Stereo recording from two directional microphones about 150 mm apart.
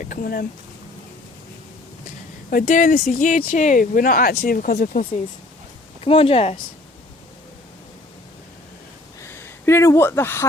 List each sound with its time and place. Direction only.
0.0 s speech: 65° left (ahead or behind)
2.5 s speech: 65° left (ahead or behind)
6.0 s speech: 40° left (ahead or behind)
9.2 s speech: 15° left (ahead or behind)